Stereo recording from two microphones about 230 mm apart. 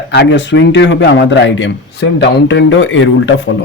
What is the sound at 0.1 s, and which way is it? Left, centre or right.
A man's voice, left.